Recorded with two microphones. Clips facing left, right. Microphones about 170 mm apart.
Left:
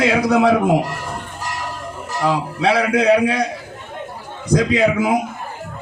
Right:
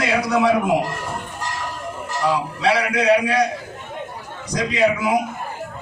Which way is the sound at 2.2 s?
55° left (ahead or behind).